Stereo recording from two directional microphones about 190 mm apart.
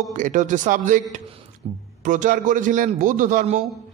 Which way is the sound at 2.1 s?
40° right (ahead or behind).